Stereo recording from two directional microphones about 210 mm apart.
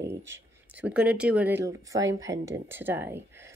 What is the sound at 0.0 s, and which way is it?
Speech, 10° right (ahead or behind).